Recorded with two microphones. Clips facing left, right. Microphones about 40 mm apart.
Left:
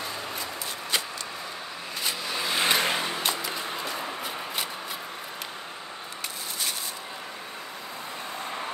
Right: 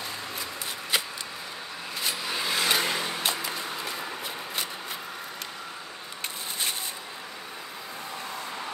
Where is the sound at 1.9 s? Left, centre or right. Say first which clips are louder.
Even; centre.